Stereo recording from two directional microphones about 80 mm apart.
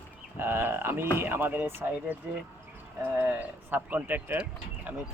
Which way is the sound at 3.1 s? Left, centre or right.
Right.